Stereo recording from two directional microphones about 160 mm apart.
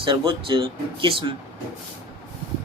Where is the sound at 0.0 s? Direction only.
30° right (ahead or behind).